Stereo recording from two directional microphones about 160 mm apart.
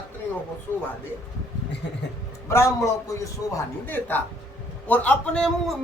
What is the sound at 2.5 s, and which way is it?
A man's voice, 15° left (ahead or behind).